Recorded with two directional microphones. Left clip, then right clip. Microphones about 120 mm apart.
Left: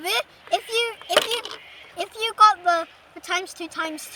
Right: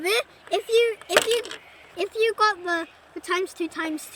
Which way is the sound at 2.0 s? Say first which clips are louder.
Left 4 dB; 30° left (ahead or behind).